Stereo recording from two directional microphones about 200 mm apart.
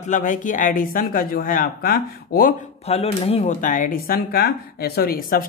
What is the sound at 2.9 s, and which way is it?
Speech, 30° left (ahead or behind).